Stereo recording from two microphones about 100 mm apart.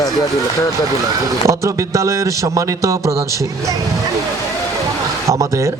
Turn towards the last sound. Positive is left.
turn(degrees=-30)  # may be behind; listen again after turning